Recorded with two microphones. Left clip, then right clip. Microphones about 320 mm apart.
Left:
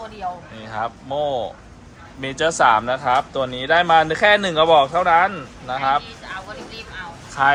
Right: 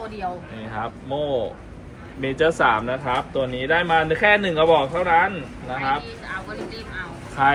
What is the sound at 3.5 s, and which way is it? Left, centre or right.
Speech, left.